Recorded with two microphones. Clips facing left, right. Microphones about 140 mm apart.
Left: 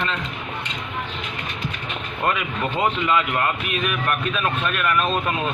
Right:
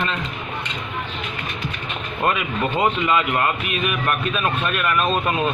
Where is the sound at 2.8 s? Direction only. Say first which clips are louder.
Right 1 dB; 15° right (ahead or behind).